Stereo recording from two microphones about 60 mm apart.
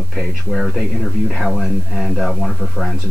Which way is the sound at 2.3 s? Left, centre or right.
Centre.